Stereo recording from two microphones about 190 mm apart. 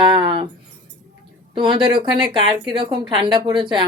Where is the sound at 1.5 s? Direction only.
25° right (ahead or behind).